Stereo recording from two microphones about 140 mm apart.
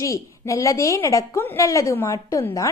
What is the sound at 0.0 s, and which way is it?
A woman's voice, 25° left (ahead or behind).